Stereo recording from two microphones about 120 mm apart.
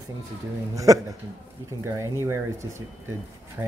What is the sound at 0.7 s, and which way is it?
Speech, 30° right (ahead or behind).